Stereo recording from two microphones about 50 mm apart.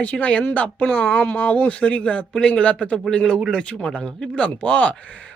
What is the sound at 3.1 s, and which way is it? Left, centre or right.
Speech, centre.